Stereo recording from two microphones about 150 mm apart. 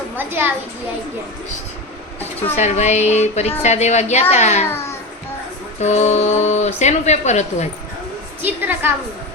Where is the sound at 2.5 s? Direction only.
50° left (ahead or behind).